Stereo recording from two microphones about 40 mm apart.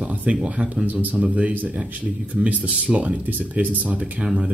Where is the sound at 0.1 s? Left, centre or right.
Right.